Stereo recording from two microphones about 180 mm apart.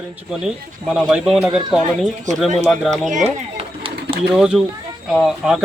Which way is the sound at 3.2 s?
35° right (ahead or behind).